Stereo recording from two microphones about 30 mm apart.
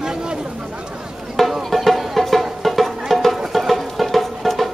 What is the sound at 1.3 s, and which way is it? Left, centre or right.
Music, centre.